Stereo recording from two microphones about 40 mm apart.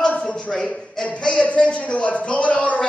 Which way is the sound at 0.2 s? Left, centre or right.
Left.